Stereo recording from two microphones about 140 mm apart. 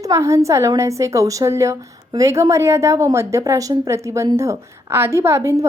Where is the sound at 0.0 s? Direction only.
20° right (ahead or behind).